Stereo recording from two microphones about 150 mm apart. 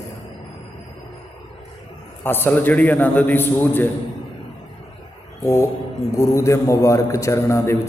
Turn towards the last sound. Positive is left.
turn(degrees=20)  # may be behind; listen again after turning